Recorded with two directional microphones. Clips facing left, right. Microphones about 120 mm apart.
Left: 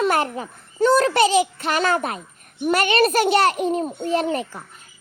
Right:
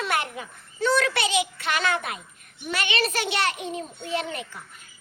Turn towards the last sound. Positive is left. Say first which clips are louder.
# left 8 dB
turn(degrees=35)  # may be behind; listen again after turning